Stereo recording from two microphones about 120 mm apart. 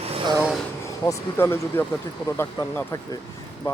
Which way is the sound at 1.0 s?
20° left (ahead or behind).